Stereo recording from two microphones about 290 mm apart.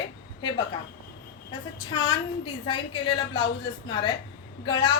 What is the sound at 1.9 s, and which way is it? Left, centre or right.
A woman's voice, centre.